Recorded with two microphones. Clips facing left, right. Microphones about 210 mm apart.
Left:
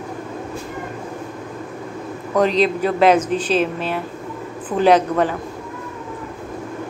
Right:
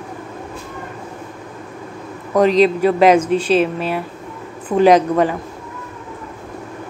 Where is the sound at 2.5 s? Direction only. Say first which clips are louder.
Right 4 dB; 10° right (ahead or behind).